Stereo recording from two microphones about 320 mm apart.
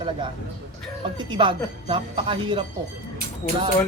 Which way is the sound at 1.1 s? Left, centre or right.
Centre.